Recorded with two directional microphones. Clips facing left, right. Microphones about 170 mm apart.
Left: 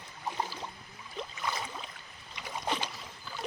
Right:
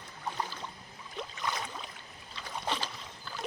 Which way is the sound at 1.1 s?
Centre (ahead or behind).